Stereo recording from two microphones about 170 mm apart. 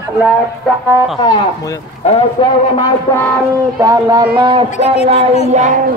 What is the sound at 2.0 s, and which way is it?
Speech, 40° left (ahead or behind).